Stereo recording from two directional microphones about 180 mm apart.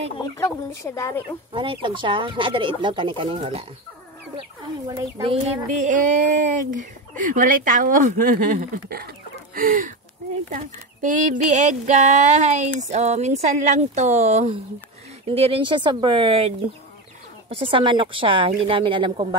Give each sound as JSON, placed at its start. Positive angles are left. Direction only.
{"t": 0.2, "sound": "speech", "side_deg": 20}
{"t": 1.5, "sound": "speech", "side_deg": -30}
{"t": 4.8, "sound": "speech", "side_deg": -20}
{"t": 5.7, "sound": "speech", "side_deg": -45}